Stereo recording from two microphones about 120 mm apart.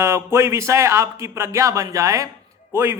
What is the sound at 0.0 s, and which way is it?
A man's voice, 20° right (ahead or behind).